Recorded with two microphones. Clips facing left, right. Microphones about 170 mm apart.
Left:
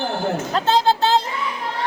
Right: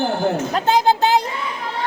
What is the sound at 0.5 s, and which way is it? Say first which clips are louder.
Speech: even; 15° right (ahead or behind).